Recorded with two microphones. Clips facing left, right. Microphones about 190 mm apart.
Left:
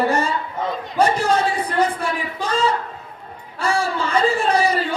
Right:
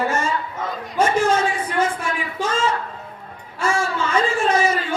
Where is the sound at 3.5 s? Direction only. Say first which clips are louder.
Left 1 dB; 35° left (ahead or behind).